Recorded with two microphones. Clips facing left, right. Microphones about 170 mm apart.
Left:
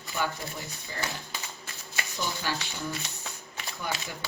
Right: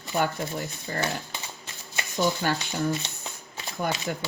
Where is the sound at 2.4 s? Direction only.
55° right (ahead or behind).